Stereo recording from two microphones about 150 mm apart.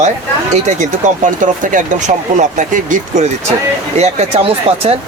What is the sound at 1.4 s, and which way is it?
Speech, 60° right (ahead or behind).